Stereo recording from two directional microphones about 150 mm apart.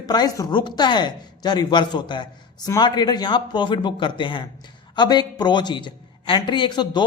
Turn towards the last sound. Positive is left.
turn(degrees=30)  # may be behind; listen again after turning